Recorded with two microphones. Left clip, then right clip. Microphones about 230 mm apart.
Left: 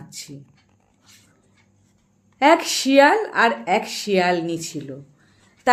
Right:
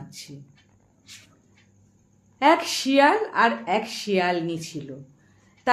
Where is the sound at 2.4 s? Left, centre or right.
Left.